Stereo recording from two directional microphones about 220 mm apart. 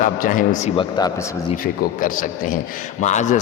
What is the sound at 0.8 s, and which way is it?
Speech, 20° left (ahead or behind).